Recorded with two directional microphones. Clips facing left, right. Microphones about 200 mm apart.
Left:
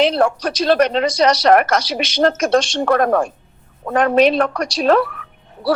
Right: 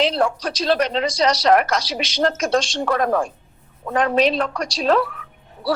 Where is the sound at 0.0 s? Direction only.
60° left (ahead or behind).